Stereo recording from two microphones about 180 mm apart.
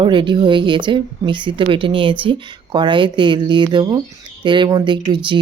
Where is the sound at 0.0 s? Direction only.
25° right (ahead or behind).